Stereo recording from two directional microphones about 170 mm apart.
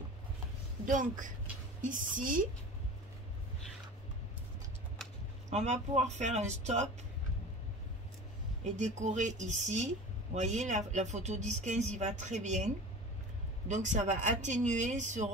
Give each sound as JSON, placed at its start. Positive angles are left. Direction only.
{"t": 0.8, "sound": "speech", "side_deg": -50}
{"t": 5.5, "sound": "speech", "side_deg": -40}
{"t": 8.7, "sound": "speech", "side_deg": -45}